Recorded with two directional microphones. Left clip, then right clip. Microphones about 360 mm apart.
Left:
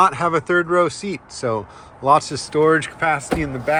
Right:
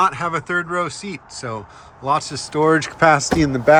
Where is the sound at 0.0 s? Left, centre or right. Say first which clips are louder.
Left 2 dB; centre.